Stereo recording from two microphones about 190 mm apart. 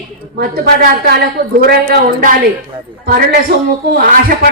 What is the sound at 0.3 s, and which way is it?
A woman's voice, 55° right (ahead or behind).